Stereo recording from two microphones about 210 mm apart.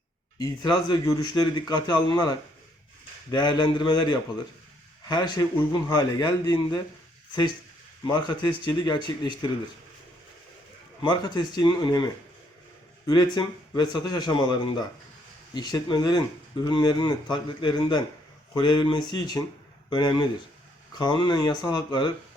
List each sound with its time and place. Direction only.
0.3 s speech: 20° left (ahead or behind)
3.3 s speech: 20° left (ahead or behind)
8.0 s speech: 20° left (ahead or behind)
11.0 s speech: 20° left (ahead or behind)
13.1 s speech: 20° left (ahead or behind)